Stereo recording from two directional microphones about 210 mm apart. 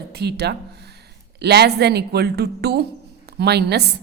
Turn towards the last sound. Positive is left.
turn(degrees=-50)  # may be behind; listen again after turning